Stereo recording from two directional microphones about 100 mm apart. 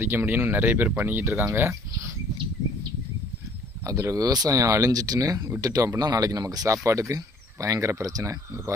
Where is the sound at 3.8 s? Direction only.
30° right (ahead or behind).